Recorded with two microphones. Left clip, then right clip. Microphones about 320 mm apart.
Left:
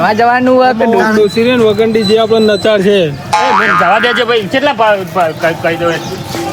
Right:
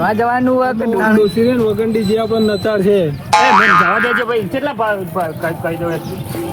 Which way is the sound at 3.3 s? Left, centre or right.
Centre.